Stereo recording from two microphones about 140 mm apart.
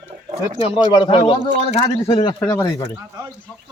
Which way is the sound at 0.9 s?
35° left (ahead or behind).